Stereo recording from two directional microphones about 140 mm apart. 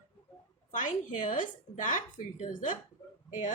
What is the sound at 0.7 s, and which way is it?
Speech, 65° left (ahead or behind).